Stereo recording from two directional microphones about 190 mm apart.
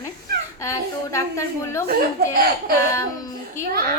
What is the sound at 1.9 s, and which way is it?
Speech, 50° right (ahead or behind).